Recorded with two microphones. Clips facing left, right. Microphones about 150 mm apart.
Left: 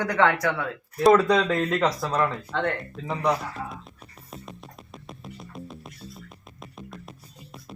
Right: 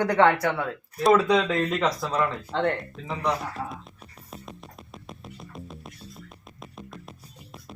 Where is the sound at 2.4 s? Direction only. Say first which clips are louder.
Right 2 dB; 30° right (ahead or behind).